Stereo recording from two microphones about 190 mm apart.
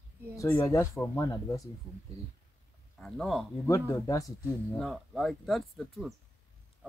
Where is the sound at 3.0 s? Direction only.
Centre (ahead or behind).